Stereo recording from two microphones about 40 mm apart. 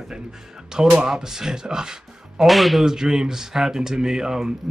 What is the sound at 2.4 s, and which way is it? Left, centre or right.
Speech, centre.